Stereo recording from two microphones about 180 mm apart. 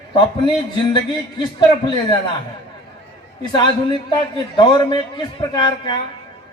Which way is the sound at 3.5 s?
25° left (ahead or behind).